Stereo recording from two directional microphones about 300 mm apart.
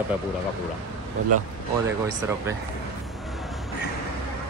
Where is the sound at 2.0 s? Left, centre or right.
Centre.